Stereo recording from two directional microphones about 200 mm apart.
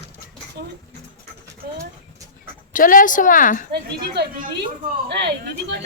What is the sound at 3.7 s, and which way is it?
Speech, 55° right (ahead or behind).